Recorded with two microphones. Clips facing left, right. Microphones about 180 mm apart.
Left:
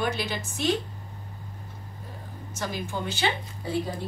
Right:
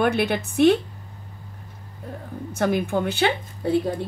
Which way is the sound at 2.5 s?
60° right (ahead or behind).